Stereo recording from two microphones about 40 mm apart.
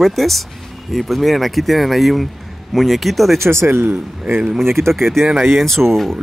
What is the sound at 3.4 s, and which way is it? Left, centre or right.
Speech, right.